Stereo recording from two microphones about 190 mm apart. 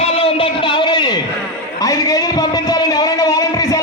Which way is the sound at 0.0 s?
30° left (ahead or behind).